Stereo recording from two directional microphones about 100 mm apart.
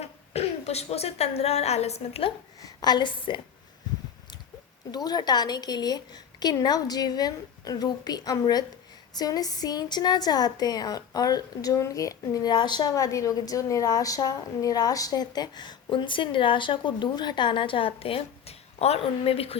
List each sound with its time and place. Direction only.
0.0 s speech: 90° left
2.6 s a woman's voice: 40° left (ahead or behind)
4.9 s a woman's voice: 40° left (ahead or behind)
12.9 s a woman's voice: 35° left (ahead or behind); by 19.5 s 70° left (ahead or behind)